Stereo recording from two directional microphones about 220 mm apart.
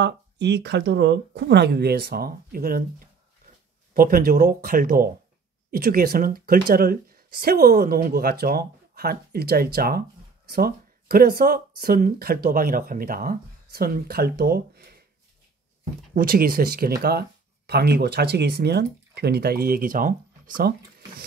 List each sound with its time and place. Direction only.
0.0 s speech: 50° right (ahead or behind)
3.9 s speech: 40° right (ahead or behind)
16.2 s speech: 40° right (ahead or behind)